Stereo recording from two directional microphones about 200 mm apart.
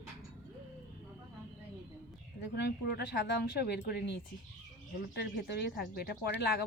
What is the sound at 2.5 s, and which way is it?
A woman's voice, 60° left (ahead or behind).